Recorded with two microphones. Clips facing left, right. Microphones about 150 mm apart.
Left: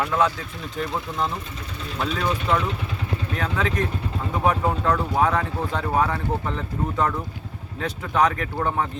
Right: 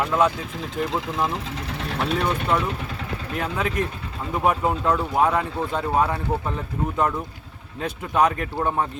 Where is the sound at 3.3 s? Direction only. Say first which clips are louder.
Right 1 dB; 15° right (ahead or behind).